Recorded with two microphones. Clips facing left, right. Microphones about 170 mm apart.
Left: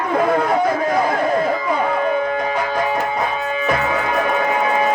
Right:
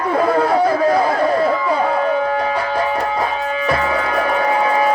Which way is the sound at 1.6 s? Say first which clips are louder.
Right 2 dB; 35° right (ahead or behind).